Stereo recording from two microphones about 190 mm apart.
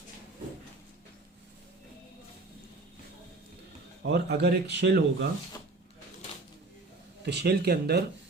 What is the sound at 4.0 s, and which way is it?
Speech, 60° right (ahead or behind).